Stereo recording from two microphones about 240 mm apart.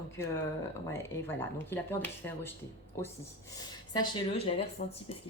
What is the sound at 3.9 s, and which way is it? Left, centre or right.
Speech, centre.